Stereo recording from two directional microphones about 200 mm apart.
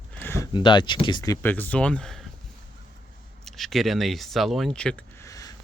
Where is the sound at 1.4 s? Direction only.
10° left (ahead or behind).